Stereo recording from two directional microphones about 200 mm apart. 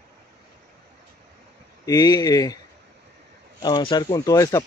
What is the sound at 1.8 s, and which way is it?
Speech, 20° left (ahead or behind).